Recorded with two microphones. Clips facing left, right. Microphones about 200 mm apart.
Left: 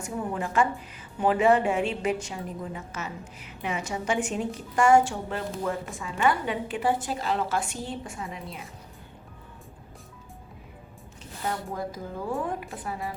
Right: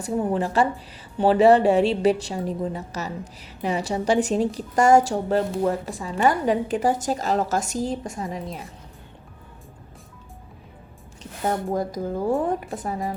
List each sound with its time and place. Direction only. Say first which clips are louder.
0.0 s a woman's voice: right 7 dB; 35° right (ahead or behind)
11.4 s a woman's voice: right 7 dB; 45° right (ahead or behind)